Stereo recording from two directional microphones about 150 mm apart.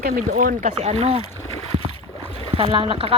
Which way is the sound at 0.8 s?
45° right (ahead or behind).